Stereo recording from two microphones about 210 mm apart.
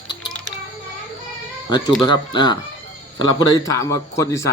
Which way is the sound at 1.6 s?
20° left (ahead or behind).